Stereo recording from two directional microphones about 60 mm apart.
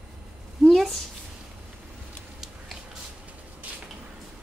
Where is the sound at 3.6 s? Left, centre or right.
Right.